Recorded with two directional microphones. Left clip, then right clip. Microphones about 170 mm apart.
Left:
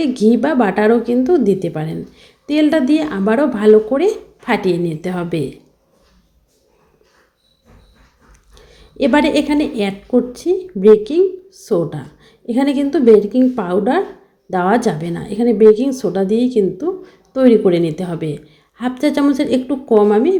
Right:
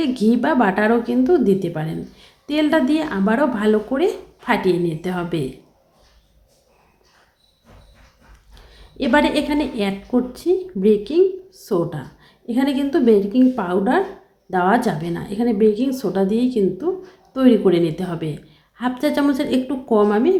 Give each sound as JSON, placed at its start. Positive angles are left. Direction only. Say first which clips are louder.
{"t": 0.0, "sound": "speech", "louder": "left 4 dB", "side_deg": 15}
{"t": 8.5, "sound": "speech", "louder": "left 7 dB", "side_deg": 15}